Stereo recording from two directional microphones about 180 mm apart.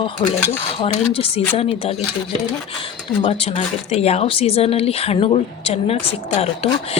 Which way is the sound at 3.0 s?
25° left (ahead or behind).